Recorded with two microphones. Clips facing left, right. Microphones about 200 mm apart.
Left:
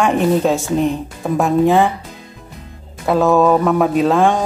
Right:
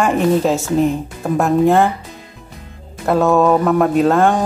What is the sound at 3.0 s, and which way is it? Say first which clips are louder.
Speech: even; centre (ahead or behind).